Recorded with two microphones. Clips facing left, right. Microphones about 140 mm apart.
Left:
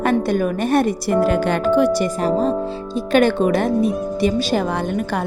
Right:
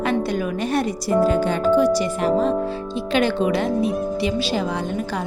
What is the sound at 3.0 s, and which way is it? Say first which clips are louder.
A woman's voice: left 5 dB; 50° left (ahead or behind).